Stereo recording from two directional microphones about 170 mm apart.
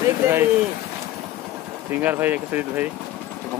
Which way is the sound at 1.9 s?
10° right (ahead or behind).